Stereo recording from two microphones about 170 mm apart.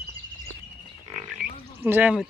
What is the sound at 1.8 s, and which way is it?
Speech, 10° right (ahead or behind).